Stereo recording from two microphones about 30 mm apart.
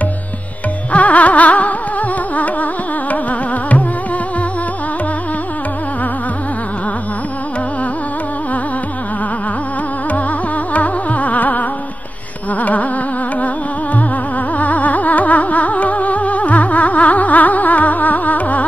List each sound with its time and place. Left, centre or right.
0.9 s carnatic music: left
10.7 s music: left
12.5 s insect: left
14.6 s music: left